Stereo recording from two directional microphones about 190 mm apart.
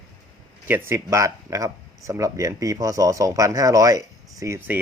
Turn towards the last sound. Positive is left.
turn(degrees=-15)  # may be behind; listen again after turning